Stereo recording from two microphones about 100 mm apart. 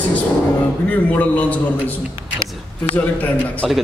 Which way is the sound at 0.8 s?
15° left (ahead or behind).